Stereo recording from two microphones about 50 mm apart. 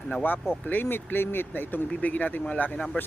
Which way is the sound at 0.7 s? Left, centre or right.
Left.